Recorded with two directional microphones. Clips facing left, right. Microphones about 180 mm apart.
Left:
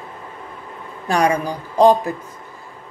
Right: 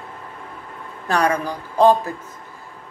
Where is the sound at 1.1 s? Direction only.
10° left (ahead or behind).